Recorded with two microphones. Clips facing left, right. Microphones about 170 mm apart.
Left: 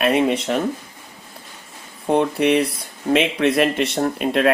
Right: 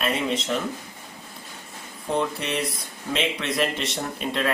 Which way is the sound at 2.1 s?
65° left (ahead or behind).